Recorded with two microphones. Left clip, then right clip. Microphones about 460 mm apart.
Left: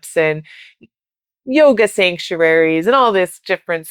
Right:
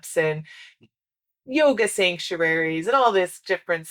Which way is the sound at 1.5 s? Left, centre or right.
Left.